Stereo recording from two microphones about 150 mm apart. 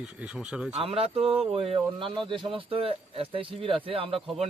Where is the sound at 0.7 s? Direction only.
40° right (ahead or behind).